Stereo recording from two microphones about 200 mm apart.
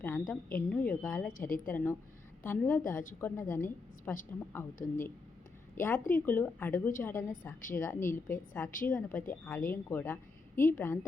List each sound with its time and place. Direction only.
0.0 s a woman's voice: 10° left (ahead or behind)
1.3 s a woman's voice: 45° left (ahead or behind)
1.6 s a woman's voice: 10° left (ahead or behind)